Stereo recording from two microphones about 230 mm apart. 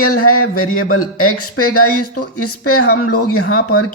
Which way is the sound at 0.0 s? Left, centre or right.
Left.